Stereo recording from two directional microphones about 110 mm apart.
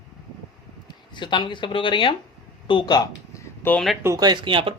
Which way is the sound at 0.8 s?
45° left (ahead or behind).